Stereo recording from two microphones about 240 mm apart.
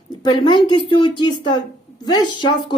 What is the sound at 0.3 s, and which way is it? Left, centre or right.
Speech, centre.